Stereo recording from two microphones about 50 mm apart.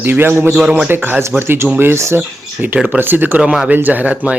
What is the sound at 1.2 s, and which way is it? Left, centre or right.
Speech, right.